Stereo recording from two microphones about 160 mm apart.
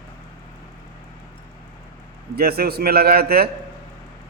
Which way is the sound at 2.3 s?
75° right (ahead or behind).